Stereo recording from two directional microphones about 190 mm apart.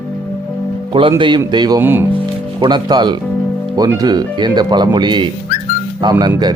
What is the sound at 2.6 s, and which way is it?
Speech, 25° right (ahead or behind).